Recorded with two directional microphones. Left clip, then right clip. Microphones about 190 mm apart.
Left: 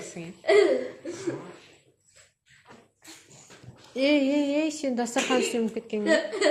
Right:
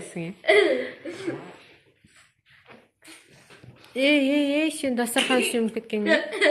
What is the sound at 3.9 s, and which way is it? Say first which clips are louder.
A woman's voice: right 2 dB; 10° right (ahead or behind).